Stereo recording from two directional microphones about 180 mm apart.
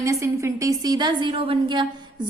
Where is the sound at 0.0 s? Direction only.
15° right (ahead or behind).